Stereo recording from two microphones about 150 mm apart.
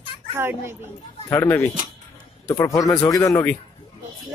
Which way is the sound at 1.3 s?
15° left (ahead or behind).